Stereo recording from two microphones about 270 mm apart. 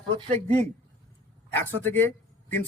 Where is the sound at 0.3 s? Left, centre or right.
Right.